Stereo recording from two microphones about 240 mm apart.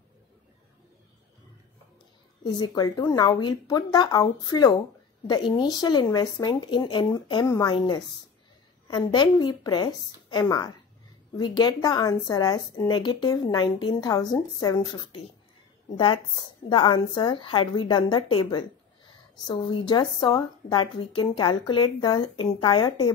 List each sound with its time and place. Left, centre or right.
2.4 s a woman's voice: centre